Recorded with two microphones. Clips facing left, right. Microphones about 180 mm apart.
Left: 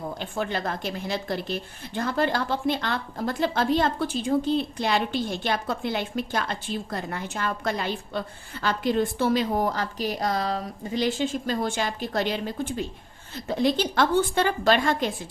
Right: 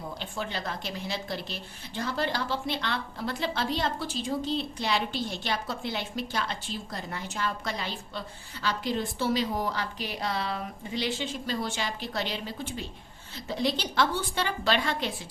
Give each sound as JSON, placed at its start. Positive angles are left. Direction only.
{"t": 0.2, "sound": "a woman's voice", "side_deg": 50}